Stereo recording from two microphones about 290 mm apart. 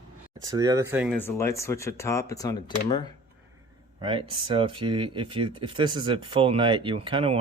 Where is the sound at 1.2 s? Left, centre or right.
Centre.